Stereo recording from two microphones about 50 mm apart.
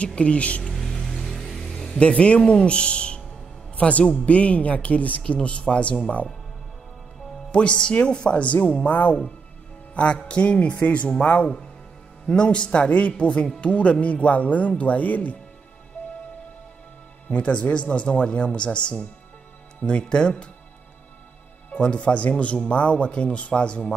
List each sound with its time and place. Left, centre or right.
0.0 s speech: left
0.7 s vehicle: centre
2.0 s speech: left
7.5 s speech: left
17.3 s speech: left
21.6 s speech: left